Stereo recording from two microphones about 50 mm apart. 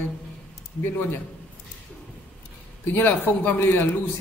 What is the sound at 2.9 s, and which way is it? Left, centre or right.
A man's voice, left.